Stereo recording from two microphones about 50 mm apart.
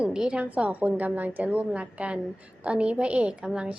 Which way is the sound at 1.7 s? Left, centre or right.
Right.